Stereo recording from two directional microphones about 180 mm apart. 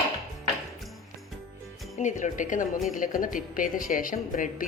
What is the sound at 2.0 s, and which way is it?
A woman's voice, 45° left (ahead or behind).